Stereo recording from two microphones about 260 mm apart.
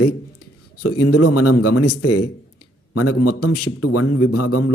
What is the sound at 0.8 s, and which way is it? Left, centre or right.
Speech, left.